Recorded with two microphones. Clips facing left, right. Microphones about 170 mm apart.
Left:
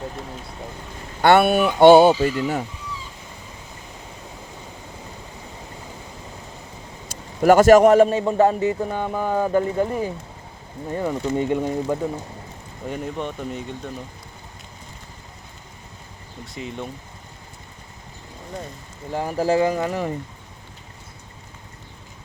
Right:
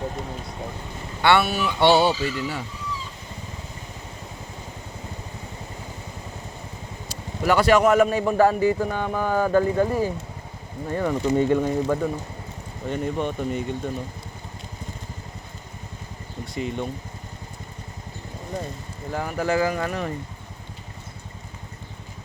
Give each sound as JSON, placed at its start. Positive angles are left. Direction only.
{"t": 1.2, "sound": "speech", "side_deg": 50}
{"t": 7.4, "sound": "a man's voice", "side_deg": 45}
{"t": 12.9, "sound": "speech", "side_deg": 0}
{"t": 16.6, "sound": "speech", "side_deg": 0}
{"t": 19.1, "sound": "a man's voice", "side_deg": 30}